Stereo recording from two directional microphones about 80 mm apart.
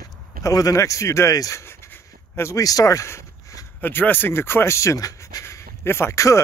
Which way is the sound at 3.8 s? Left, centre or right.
Left.